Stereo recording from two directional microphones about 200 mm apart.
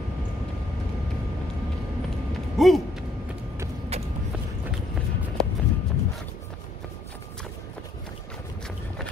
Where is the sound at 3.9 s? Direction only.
30° right (ahead or behind).